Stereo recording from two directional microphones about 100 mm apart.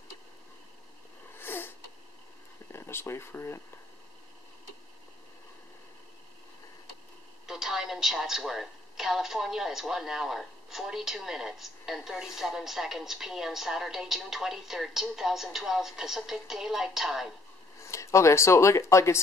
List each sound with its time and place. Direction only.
1.4 s sniff: 20° left (ahead or behind)
2.7 s speech: 25° left (ahead or behind)
7.4 s speech: 5° right (ahead or behind)
17.8 s speech: 30° left (ahead or behind)